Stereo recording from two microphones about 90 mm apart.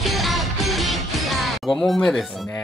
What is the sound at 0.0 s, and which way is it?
Music, centre (ahead or behind).